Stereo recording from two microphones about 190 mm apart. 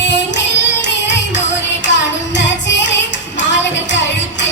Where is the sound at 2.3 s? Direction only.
70° left (ahead or behind).